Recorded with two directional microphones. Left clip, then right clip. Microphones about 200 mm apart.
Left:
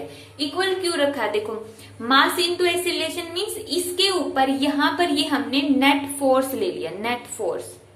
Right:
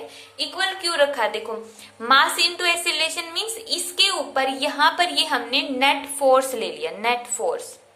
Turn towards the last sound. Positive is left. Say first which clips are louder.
# right 3 dB
turn(degrees=-25)  # may be behind; listen again after turning